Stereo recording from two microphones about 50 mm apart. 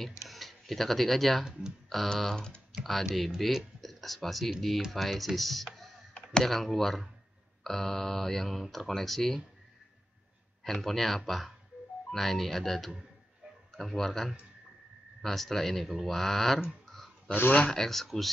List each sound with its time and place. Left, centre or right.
0.0 s speech: centre
2.1 s speech: centre
2.8 s speech: centre
6.1 s clicking: centre
6.4 s speech: centre
10.6 s speech: centre
16.8 s a sound: centre
17.3 s speech: left
17.6 s speech: centre